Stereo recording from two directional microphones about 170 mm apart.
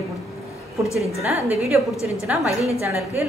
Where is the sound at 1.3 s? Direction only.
15° right (ahead or behind).